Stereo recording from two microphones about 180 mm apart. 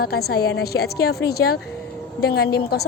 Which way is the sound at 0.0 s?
60° left (ahead or behind).